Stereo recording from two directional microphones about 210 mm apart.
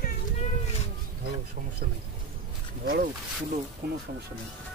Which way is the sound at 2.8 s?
45° right (ahead or behind).